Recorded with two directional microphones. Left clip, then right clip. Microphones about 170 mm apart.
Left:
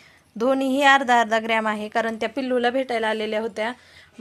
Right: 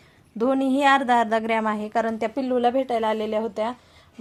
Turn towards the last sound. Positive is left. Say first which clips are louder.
# even
turn(degrees=-5)  # may be behind; listen again after turning